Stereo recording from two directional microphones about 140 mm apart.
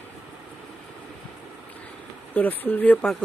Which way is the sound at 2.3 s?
15° left (ahead or behind).